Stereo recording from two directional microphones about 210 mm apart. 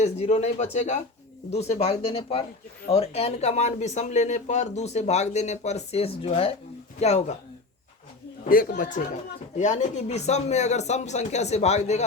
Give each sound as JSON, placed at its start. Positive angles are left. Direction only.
{"t": 0.0, "sound": "speech", "side_deg": 30}
{"t": 8.4, "sound": "speech", "side_deg": 40}